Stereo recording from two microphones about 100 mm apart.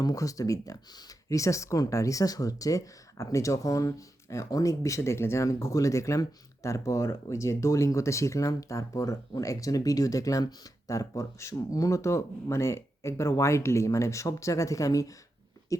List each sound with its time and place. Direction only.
0.0 s speech: 35° left (ahead or behind)